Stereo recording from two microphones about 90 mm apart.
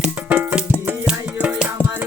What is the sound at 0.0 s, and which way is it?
Music, 10° right (ahead or behind).